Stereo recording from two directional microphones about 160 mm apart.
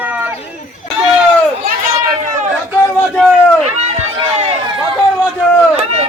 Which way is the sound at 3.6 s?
45° right (ahead or behind).